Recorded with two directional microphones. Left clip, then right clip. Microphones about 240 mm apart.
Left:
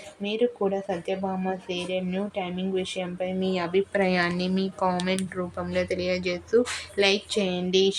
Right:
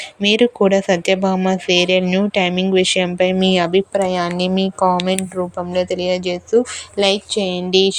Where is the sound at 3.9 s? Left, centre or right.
Centre.